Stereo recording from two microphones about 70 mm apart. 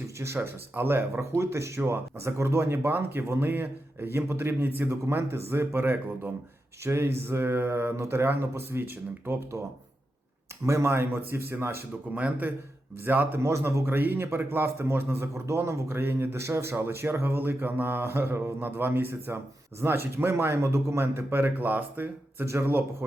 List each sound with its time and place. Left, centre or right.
0.3 s speech: right
10.7 s speech: right
13.4 s speech: right